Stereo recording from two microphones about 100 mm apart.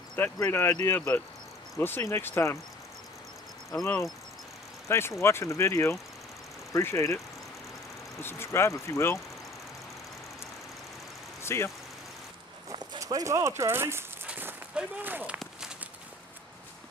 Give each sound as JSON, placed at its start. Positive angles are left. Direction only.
{"t": 0.4, "sound": "speech", "side_deg": 30}
{"t": 4.8, "sound": "speech", "side_deg": 25}
{"t": 8.2, "sound": "speech", "side_deg": 25}
{"t": 11.4, "sound": "speech", "side_deg": 25}
{"t": 12.6, "sound": "a sound", "side_deg": -45}
{"t": 13.0, "sound": "speech", "side_deg": -30}
{"t": 14.2, "sound": "walk", "side_deg": -15}